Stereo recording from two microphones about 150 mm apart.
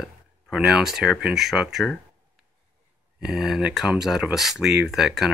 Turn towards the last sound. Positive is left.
turn(degrees=0)  # may be behind; listen again after turning